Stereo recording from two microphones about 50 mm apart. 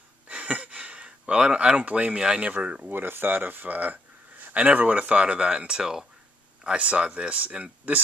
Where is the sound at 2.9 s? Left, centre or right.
Right.